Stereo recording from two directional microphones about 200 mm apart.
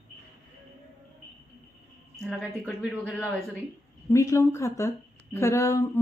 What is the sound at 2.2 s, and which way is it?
A woman's voice, centre (ahead or behind).